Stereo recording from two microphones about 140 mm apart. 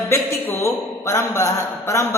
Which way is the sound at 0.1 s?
20° left (ahead or behind).